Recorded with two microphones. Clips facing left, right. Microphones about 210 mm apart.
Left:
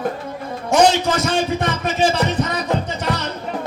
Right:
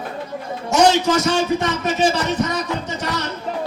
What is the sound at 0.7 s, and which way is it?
A man's voice, 55° left (ahead or behind).